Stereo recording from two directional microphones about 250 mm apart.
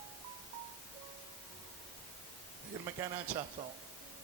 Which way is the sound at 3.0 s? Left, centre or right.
Centre.